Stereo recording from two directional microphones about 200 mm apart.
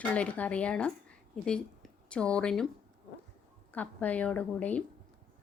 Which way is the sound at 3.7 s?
5° left (ahead or behind).